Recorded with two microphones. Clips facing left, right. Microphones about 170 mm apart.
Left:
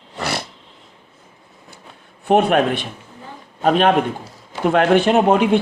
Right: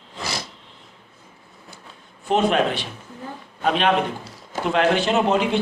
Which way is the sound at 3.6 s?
45° left (ahead or behind).